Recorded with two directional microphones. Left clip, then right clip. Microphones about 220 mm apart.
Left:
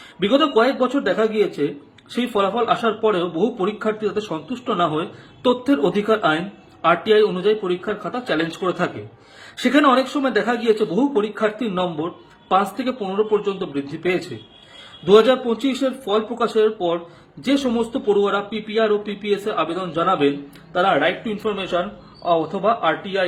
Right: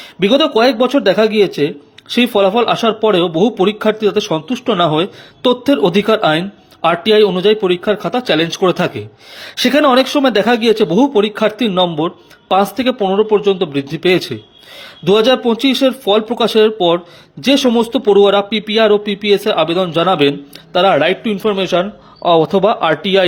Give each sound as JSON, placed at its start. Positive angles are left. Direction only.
{"t": 0.2, "sound": "speech", "side_deg": -35}